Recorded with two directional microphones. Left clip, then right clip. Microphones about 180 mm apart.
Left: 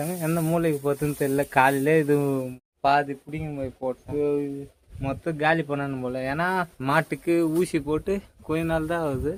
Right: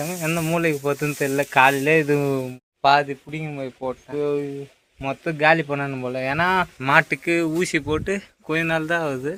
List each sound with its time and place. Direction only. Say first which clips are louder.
0.0 s speech: right 2 dB; 5° left (ahead or behind)
2.1 s a man's voice: right 2 dB; 15° right (ahead or behind)
6.7 s speech: right 6 dB; centre (ahead or behind)